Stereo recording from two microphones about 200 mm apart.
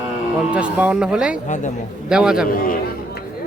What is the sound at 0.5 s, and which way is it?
Speech, 5° right (ahead or behind).